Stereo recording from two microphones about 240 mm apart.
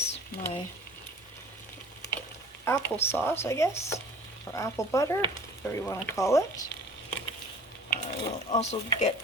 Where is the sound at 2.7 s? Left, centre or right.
Centre.